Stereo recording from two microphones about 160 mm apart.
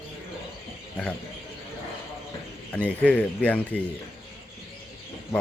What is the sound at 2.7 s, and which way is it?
A man's voice, 10° left (ahead or behind).